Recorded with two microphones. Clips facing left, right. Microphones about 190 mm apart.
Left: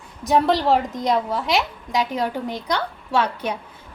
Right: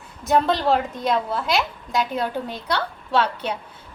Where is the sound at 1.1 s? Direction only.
15° left (ahead or behind).